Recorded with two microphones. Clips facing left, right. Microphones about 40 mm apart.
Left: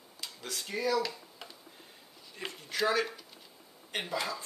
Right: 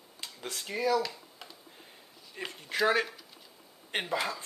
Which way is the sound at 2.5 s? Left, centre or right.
Right.